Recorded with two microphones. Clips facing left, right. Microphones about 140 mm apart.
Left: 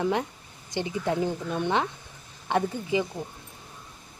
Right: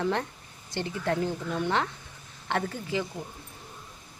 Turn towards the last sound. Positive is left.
turn(degrees=15)  # may be behind; listen again after turning